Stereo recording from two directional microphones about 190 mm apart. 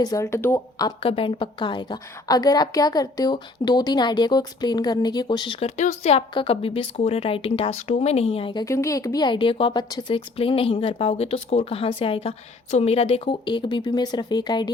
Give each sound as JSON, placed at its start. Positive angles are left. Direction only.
{"t": 0.0, "sound": "a woman's voice", "side_deg": 15}